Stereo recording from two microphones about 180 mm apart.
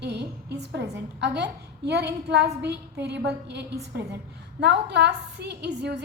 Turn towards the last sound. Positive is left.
turn(degrees=-70)  # may be behind; listen again after turning